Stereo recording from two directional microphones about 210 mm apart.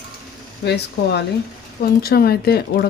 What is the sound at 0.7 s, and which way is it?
A woman's voice, 55° left (ahead or behind).